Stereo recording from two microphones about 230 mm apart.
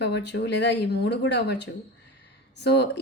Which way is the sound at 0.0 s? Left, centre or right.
Left.